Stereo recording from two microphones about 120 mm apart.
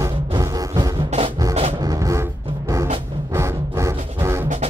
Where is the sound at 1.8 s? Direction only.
30° right (ahead or behind).